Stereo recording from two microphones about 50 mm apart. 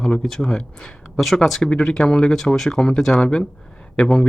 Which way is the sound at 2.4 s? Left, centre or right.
Centre.